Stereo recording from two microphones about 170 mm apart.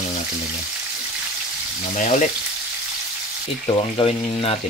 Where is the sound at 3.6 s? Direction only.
30° left (ahead or behind).